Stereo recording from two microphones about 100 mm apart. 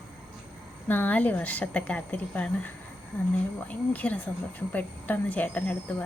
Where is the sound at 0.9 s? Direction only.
15° left (ahead or behind).